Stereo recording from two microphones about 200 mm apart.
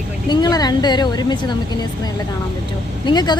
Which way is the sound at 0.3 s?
20° left (ahead or behind).